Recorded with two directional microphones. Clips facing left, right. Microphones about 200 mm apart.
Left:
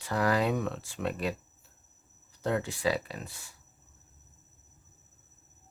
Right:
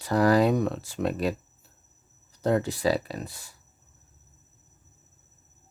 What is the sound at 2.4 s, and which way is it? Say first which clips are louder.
Speech: right 6 dB; 40° right (ahead or behind).